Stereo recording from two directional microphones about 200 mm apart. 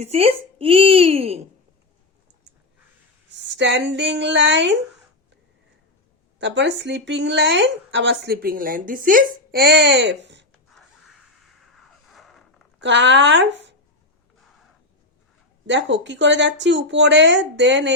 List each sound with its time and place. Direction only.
0.0 s a child's voice: 30° right (ahead or behind)
3.6 s speech: 60° right (ahead or behind)
6.4 s speech: 60° right (ahead or behind)
11.8 s music: centre (ahead or behind)
12.8 s speech: 65° right (ahead or behind)
15.6 s speech: 65° right (ahead or behind)